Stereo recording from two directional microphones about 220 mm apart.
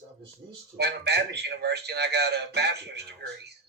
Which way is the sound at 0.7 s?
50° right (ahead or behind).